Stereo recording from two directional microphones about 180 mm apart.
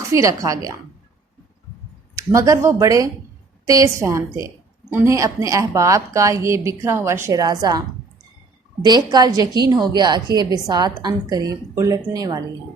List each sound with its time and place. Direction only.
0.1 s a woman's voice: 20° right (ahead or behind)
2.1 s a woman's voice: 20° right (ahead or behind)